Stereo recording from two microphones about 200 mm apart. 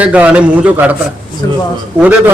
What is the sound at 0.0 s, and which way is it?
Speech, 5° right (ahead or behind).